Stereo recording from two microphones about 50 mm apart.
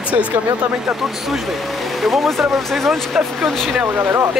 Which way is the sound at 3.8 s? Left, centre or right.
Right.